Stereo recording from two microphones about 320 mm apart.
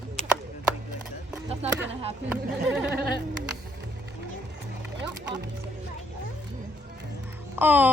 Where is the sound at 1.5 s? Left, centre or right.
Centre.